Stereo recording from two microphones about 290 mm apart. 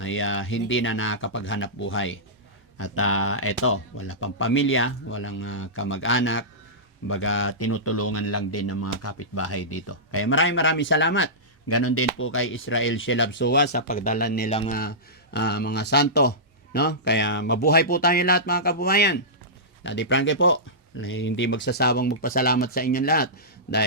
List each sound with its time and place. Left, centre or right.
0.0 s speech: left